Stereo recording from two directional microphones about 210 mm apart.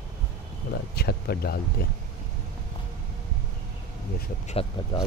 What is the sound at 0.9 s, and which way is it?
Speech, 50° left (ahead or behind).